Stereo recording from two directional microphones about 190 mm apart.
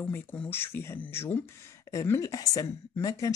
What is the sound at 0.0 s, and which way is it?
Speech, 10° left (ahead or behind).